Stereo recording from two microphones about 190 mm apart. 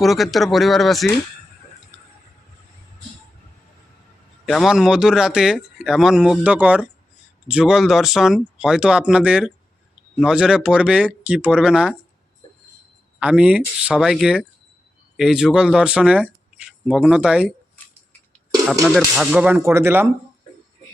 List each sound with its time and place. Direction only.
0.0 s speech: centre (ahead or behind)
1.9 s a sound: 5° right (ahead or behind)
4.4 s speech: centre (ahead or behind)
13.1 s speech: 5° right (ahead or behind)
18.7 s speech: centre (ahead or behind)